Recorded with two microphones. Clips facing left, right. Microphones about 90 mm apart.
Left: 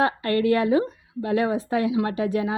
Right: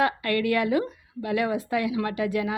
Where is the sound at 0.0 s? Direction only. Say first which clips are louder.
Left 2 dB; 30° left (ahead or behind).